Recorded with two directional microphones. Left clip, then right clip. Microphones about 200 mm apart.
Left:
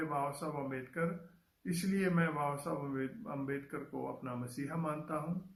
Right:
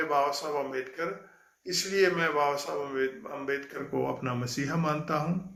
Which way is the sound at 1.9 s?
25° right (ahead or behind).